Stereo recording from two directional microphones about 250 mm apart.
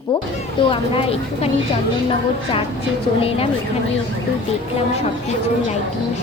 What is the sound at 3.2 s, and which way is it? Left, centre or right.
Speech, left.